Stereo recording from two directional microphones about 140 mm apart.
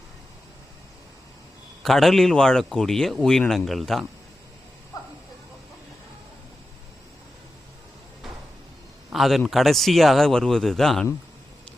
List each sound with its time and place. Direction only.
1.8 s speech: centre (ahead or behind)
9.1 s a man's voice: centre (ahead or behind)